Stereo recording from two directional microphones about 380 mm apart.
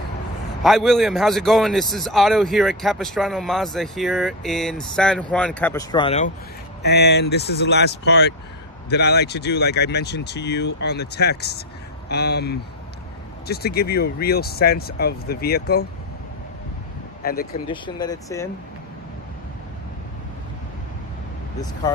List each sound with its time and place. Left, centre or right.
0.7 s a man's voice: centre
6.8 s speech: left
17.2 s speech: left
17.6 s speech: centre